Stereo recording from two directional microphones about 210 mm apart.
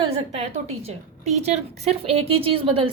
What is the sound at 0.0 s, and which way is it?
A woman's voice, 30° right (ahead or behind).